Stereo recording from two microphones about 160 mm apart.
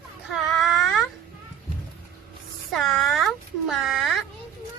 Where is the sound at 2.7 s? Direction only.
Centre (ahead or behind).